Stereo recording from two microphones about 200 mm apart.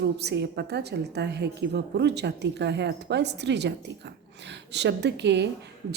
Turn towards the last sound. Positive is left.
turn(degrees=-60)  # may be behind; listen again after turning